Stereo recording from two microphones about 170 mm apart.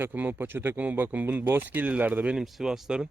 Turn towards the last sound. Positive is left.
turn(degrees=-5)  # may be behind; listen again after turning